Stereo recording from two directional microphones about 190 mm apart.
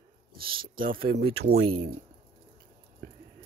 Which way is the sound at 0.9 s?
50° right (ahead or behind).